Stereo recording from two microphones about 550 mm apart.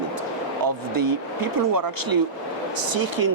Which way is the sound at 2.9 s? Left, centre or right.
Right.